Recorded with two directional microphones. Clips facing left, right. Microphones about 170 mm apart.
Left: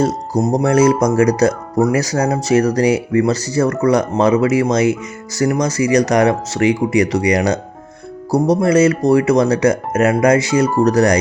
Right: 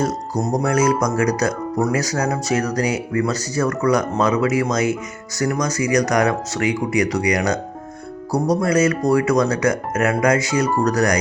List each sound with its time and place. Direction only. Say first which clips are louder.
0.0 s speech: left 5 dB; 25° left (ahead or behind)